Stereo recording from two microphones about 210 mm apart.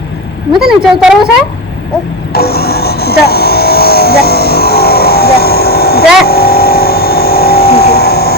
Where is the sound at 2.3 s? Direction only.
50° left (ahead or behind).